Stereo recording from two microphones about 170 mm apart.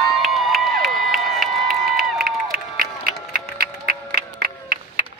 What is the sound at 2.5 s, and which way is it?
Music, 65° right (ahead or behind).